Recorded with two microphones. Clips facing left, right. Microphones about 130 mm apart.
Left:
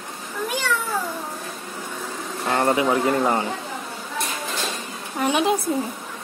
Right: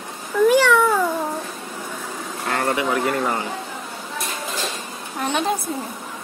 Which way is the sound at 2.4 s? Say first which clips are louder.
Left 2 dB; 25° left (ahead or behind).